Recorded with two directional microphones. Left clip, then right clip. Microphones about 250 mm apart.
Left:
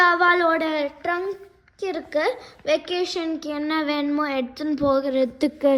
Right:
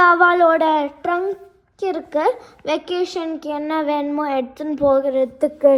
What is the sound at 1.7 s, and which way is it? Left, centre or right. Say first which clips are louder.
A child's voice: right 4 dB; centre.